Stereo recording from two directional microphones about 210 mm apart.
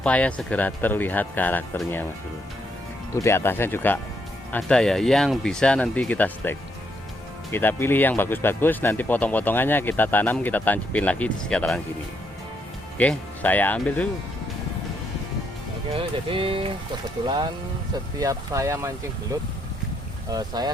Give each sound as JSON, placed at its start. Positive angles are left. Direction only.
{"t": 0.0, "sound": "speech", "side_deg": 5}
{"t": 3.2, "sound": "speech", "side_deg": 10}
{"t": 13.0, "sound": "speech", "side_deg": 5}
{"t": 15.9, "sound": "speech", "side_deg": -25}